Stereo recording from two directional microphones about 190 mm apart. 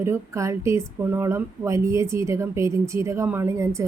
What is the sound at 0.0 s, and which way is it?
Speech, 15° right (ahead or behind).